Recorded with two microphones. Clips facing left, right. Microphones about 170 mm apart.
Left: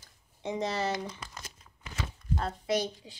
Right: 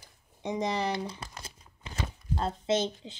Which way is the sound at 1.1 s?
30° right (ahead or behind).